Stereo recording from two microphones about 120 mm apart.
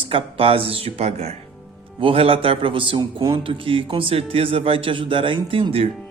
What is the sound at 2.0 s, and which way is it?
A man's voice, 50° right (ahead or behind).